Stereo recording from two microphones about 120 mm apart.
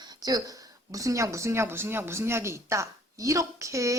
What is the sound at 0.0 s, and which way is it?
A woman's voice, 35° right (ahead or behind).